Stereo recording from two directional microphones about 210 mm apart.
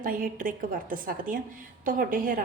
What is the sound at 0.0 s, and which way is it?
A woman's voice, 40° right (ahead or behind).